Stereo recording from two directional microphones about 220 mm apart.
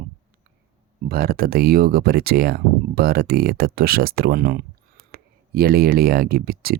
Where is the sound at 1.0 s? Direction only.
40° right (ahead or behind).